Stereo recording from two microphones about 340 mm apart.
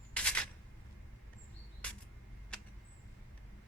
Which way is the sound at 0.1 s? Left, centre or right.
Centre.